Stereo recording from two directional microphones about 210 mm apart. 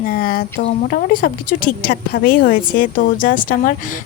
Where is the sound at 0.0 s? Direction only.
45° left (ahead or behind).